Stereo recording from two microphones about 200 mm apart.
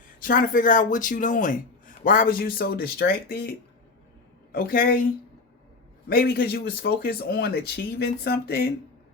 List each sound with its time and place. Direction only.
0.2 s speech: 45° left (ahead or behind)
4.5 s speech: 50° left (ahead or behind)
6.1 s speech: 50° left (ahead or behind)